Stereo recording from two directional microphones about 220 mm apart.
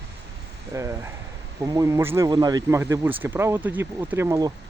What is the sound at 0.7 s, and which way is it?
Speech, 15° right (ahead or behind).